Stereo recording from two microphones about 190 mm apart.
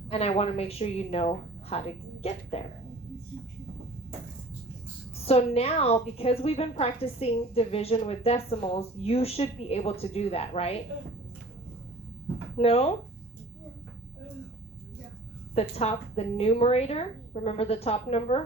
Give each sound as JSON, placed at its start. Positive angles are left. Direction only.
{"t": 0.1, "sound": "a woman's voice", "side_deg": 35}
{"t": 5.2, "sound": "a woman's voice", "side_deg": 35}
{"t": 12.5, "sound": "a woman's voice", "side_deg": 30}
{"t": 15.5, "sound": "a woman's voice", "side_deg": 35}